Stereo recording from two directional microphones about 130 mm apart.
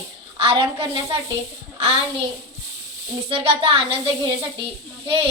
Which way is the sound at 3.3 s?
45° right (ahead or behind).